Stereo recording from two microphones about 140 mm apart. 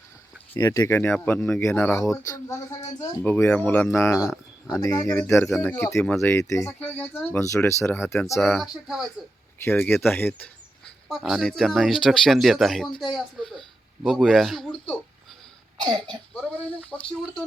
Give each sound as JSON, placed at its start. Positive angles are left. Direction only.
{"t": 0.6, "sound": "speech", "side_deg": 25}
{"t": 3.2, "sound": "speech", "side_deg": 10}
{"t": 4.2, "sound": "a sound", "side_deg": -5}
{"t": 4.8, "sound": "speech", "side_deg": 20}
{"t": 8.4, "sound": "speech", "side_deg": 0}
{"t": 9.6, "sound": "speech", "side_deg": 10}
{"t": 11.1, "sound": "speech", "side_deg": 0}
{"t": 14.7, "sound": "a sound", "side_deg": 10}
{"t": 15.8, "sound": "speech", "side_deg": -30}
{"t": 16.3, "sound": "speech", "side_deg": 10}